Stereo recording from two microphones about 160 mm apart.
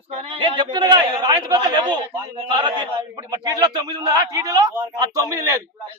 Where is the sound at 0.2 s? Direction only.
30° right (ahead or behind).